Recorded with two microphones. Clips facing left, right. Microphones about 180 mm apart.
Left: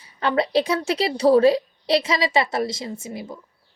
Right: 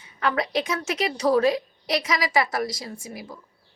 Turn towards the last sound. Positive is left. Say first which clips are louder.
# left 5 dB
turn(degrees=25)  # may be behind; listen again after turning